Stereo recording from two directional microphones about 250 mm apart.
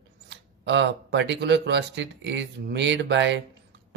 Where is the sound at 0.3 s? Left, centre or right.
Right.